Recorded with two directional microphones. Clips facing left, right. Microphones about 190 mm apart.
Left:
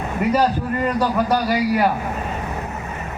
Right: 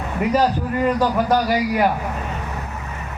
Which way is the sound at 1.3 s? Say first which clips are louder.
Even; 15° right (ahead or behind).